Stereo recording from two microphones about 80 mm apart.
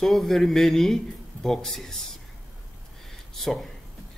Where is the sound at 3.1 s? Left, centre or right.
Centre.